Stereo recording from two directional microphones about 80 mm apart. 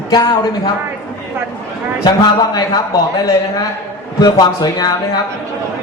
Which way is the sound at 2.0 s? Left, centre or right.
Left.